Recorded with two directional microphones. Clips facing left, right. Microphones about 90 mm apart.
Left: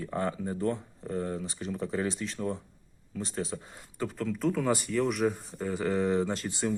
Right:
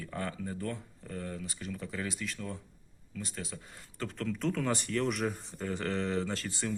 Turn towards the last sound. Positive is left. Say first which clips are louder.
# left 5 dB
turn(degrees=20)  # may be behind; listen again after turning